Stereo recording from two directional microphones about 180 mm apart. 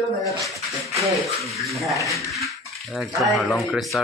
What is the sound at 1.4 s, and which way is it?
Speech, 15° right (ahead or behind).